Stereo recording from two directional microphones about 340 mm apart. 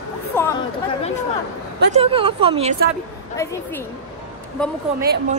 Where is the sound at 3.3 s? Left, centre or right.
Centre.